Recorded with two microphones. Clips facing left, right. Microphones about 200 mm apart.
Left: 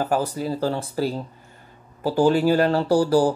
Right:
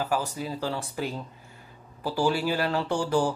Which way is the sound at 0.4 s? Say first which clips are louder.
Left 7 dB; 40° left (ahead or behind).